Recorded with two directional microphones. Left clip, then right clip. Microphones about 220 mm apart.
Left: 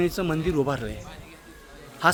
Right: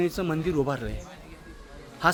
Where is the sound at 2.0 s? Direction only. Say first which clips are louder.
Left 2 dB; 10° left (ahead or behind).